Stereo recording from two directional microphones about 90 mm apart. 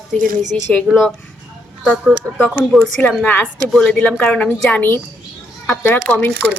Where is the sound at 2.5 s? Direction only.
Centre (ahead or behind).